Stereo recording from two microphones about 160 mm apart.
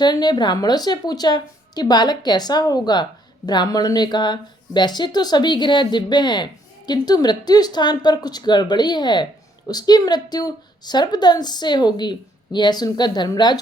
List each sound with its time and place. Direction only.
0.0 s a woman's voice: 25° left (ahead or behind)